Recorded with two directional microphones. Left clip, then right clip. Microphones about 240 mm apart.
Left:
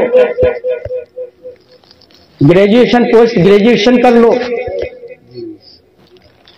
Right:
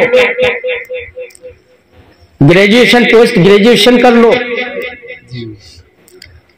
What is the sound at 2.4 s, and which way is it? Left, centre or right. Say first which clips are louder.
A man's voice: right 1 dB; right.